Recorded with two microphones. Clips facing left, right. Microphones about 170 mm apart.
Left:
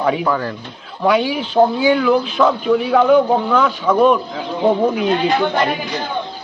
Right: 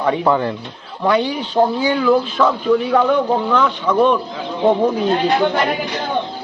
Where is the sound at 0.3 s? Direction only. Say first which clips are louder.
Right 3 dB; 20° right (ahead or behind).